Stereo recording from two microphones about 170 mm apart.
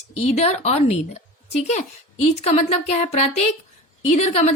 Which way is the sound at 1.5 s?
40° left (ahead or behind).